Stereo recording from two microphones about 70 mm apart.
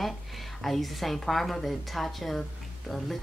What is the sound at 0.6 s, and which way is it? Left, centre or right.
Speech, centre.